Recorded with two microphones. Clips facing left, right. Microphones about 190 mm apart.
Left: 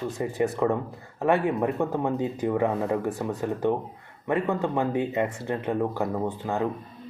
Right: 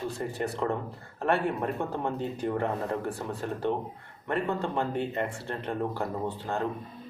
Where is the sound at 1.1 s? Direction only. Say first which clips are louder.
Left 4 dB; 15° left (ahead or behind).